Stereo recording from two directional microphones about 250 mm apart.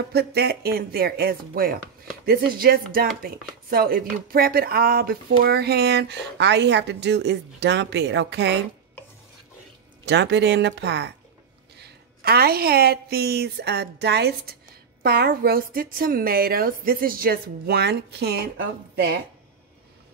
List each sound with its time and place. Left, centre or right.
0.1 s a woman's voice: right
10.0 s a woman's voice: right